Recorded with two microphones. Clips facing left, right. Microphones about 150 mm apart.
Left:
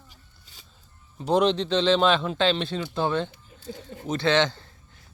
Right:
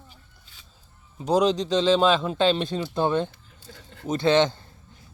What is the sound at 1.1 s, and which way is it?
Speech, 10° right (ahead or behind).